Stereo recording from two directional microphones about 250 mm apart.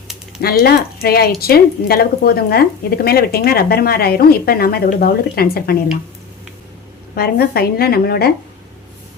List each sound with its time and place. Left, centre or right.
0.4 s speech: left
7.2 s speech: left